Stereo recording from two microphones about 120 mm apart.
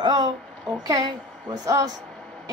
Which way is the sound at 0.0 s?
35° right (ahead or behind).